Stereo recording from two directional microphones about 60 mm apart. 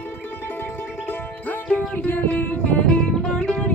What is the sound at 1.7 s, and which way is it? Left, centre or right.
Music, left.